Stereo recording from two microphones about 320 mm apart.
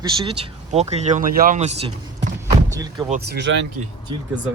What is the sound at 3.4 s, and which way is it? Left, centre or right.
Speech, right.